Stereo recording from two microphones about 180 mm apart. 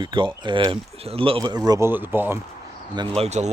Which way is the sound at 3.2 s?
40° right (ahead or behind).